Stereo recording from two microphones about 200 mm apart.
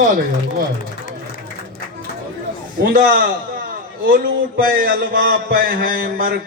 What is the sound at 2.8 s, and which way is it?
A man's voice, 50° right (ahead or behind).